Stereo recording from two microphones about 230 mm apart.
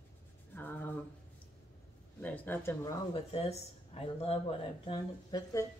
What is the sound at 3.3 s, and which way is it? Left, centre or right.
Speech, left.